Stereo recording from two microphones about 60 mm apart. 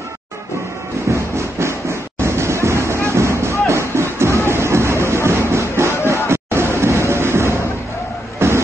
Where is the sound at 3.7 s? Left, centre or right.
Right.